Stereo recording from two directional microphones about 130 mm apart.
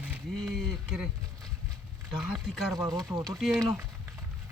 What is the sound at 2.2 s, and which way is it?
Speech, centre (ahead or behind).